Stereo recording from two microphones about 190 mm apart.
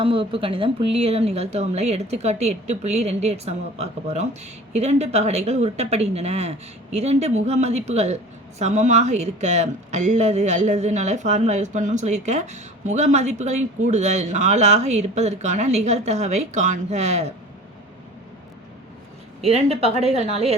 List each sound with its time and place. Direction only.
0.0 s a woman's voice: 30° right (ahead or behind)
19.4 s a woman's voice: 30° right (ahead or behind)